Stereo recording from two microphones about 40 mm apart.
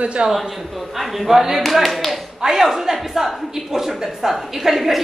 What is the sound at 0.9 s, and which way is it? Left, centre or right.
Speech, centre.